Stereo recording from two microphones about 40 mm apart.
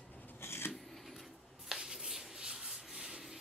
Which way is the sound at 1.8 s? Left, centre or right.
Centre.